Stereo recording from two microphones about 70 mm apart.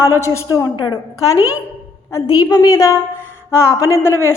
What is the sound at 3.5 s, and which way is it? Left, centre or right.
Speech, left.